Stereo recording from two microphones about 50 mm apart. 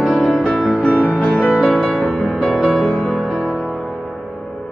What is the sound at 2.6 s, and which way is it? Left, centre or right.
Music, centre.